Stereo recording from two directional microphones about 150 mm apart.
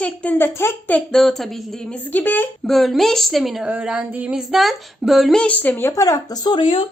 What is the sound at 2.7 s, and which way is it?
A woman's voice, centre (ahead or behind).